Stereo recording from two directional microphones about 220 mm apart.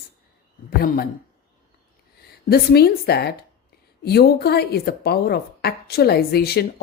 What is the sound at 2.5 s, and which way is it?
Speech, 45° left (ahead or behind).